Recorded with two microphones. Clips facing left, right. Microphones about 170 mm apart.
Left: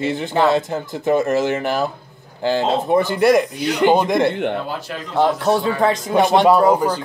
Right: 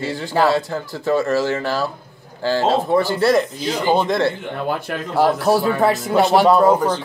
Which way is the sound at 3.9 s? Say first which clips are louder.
Right 1 dB; 15° left (ahead or behind).